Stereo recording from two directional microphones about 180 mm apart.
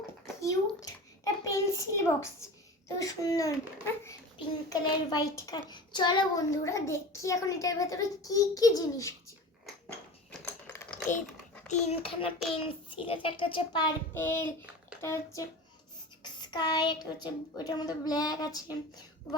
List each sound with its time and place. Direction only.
0.4 s a sound: 20° left (ahead or behind)
3.0 s a child's voice: 20° left (ahead or behind)
10.4 s typewriter: 10° left (ahead or behind)
11.7 s a child's voice: 35° left (ahead or behind)
14.2 s a child's voice: 10° left (ahead or behind)